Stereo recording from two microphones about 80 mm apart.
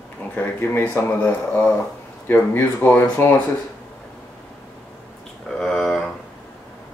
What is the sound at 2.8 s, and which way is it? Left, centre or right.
Speech, left.